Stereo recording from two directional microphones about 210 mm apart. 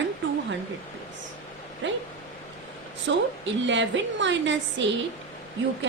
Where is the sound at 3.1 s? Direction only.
60° right (ahead or behind).